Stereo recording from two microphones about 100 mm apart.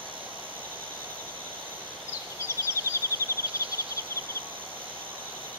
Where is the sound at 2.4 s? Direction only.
25° left (ahead or behind).